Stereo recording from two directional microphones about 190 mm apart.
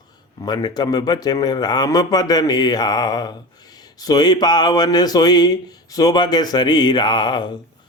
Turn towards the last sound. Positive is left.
turn(degrees=25)  # may be behind; listen again after turning